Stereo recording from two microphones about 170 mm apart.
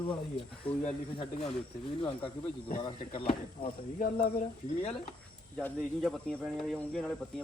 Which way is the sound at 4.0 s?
65° left (ahead or behind).